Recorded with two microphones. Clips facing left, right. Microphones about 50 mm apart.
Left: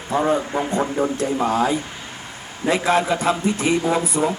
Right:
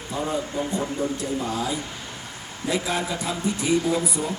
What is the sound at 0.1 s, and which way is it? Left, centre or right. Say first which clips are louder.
Speech: left 8 dB; left.